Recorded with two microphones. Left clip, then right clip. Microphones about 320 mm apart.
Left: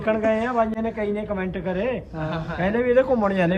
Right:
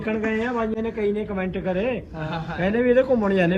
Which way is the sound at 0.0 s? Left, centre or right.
Centre.